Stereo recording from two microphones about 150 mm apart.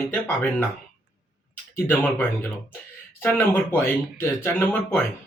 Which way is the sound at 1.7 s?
10° left (ahead or behind).